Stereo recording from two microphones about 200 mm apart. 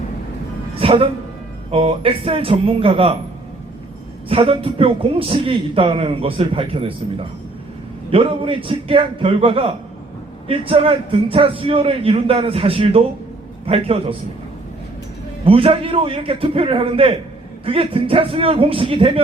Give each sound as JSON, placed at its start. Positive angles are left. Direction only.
{"t": 0.8, "sound": "music", "side_deg": -25}
{"t": 1.7, "sound": "a man's voice", "side_deg": -30}
{"t": 4.3, "sound": "a man's voice", "side_deg": -30}
{"t": 15.4, "sound": "a man's voice", "side_deg": -30}